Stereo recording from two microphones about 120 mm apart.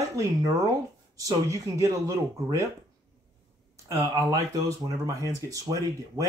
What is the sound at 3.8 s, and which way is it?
Speech, 30° right (ahead or behind).